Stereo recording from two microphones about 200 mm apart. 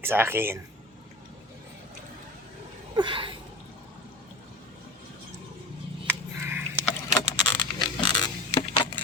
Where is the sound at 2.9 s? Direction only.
25° right (ahead or behind).